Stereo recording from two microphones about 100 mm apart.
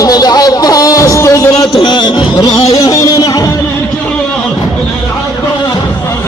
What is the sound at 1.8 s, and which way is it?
Music, 50° left (ahead or behind).